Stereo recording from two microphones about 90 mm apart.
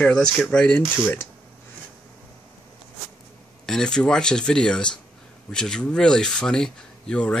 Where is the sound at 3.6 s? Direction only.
5° left (ahead or behind).